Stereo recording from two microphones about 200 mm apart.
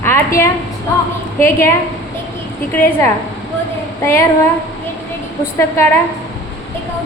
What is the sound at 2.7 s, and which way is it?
A woman's voice, 10° left (ahead or behind).